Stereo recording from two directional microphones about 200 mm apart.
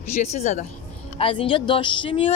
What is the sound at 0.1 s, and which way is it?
Speech, 35° left (ahead or behind).